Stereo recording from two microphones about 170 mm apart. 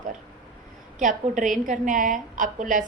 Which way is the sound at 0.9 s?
50° right (ahead or behind).